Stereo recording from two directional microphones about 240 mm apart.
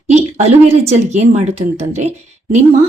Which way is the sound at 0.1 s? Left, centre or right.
Right.